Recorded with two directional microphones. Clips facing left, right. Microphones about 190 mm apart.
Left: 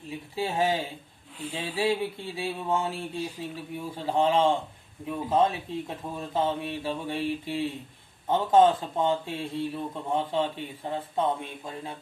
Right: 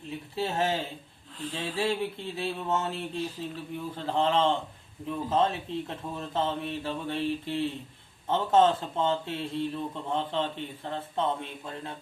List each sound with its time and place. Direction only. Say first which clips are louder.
0.1 s speech: left 1 dB; 10° left (ahead or behind)